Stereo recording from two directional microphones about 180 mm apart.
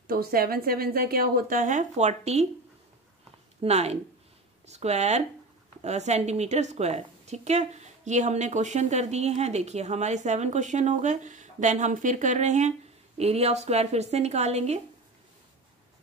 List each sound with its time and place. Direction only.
0.0 s a woman's voice: 55° right (ahead or behind); by 2.4 s 40° right (ahead or behind)
3.6 s a woman's voice: 35° right (ahead or behind)